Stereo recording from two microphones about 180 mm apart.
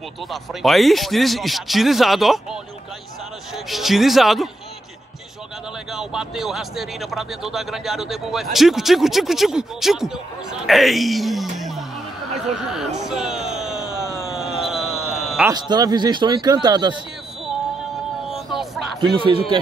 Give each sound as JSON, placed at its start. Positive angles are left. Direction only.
{"t": 0.3, "sound": "speech", "side_deg": 0}
{"t": 5.9, "sound": "speech", "side_deg": 0}
{"t": 11.5, "sound": "music", "side_deg": 0}
{"t": 12.4, "sound": "speech", "side_deg": -5}
{"t": 13.0, "sound": "music", "side_deg": -5}
{"t": 14.3, "sound": "a sound", "side_deg": 0}
{"t": 15.5, "sound": "speech", "side_deg": -25}
{"t": 18.3, "sound": "vehicle", "side_deg": 0}
{"t": 19.1, "sound": "speech", "side_deg": -30}